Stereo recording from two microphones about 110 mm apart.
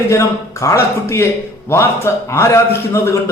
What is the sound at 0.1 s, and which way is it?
A man's voice, 30° left (ahead or behind).